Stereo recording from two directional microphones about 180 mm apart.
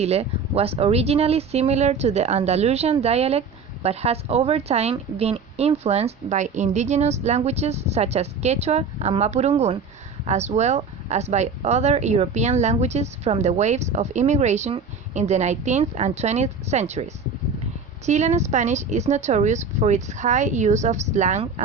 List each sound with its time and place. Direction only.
0.0 s speech: 35° right (ahead or behind)